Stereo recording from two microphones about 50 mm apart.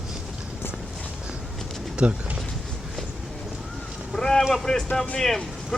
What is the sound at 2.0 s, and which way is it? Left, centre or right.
Speech, right.